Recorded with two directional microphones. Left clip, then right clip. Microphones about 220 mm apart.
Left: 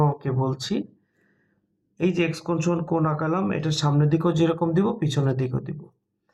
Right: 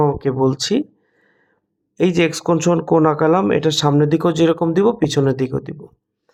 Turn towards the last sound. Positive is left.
turn(degrees=-45)  # may be behind; listen again after turning